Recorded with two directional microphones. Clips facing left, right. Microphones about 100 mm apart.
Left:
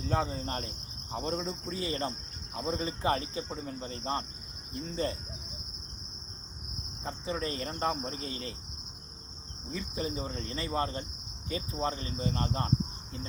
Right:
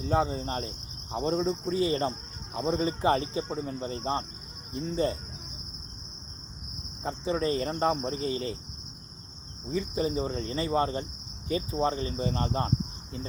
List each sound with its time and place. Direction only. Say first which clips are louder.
0.0 s cricket: right 5 dB; 20° right (ahead or behind)
7.0 s cricket: right 6 dB; 25° right (ahead or behind)
9.6 s cricket: right 7 dB; 30° right (ahead or behind)